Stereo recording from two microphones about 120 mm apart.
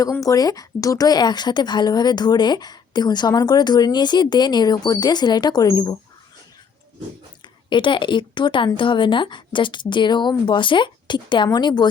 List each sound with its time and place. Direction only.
0.0 s speech: 30° left (ahead or behind)
7.4 s speech: 40° left (ahead or behind)